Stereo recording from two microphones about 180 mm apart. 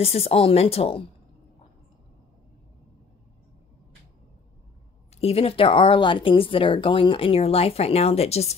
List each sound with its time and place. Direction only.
0.0 s speech: 35° left (ahead or behind)
5.1 s speech: 35° left (ahead or behind)